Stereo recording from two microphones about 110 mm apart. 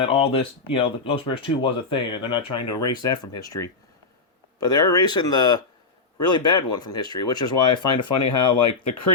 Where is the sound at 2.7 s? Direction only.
35° left (ahead or behind).